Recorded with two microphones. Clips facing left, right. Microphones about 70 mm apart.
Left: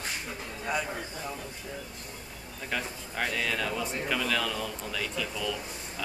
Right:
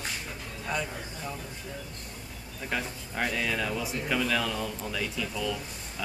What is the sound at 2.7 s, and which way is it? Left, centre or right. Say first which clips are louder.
A man's voice: right 1 dB; centre.